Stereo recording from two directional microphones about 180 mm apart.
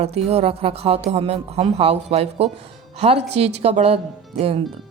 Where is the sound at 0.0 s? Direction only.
35° right (ahead or behind).